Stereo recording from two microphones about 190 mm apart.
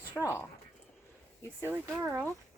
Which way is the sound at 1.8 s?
15° right (ahead or behind).